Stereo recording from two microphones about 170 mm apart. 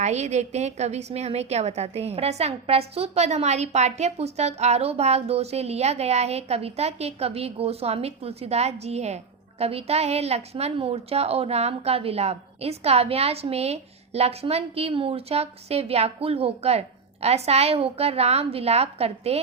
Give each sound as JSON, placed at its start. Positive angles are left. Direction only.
{"t": 0.0, "sound": "a woman's voice", "side_deg": -40}